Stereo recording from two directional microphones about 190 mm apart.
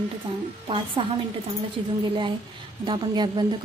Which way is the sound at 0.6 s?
25° right (ahead or behind).